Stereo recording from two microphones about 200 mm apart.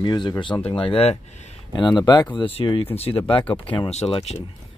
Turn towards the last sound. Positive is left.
turn(degrees=30)  # may be behind; listen again after turning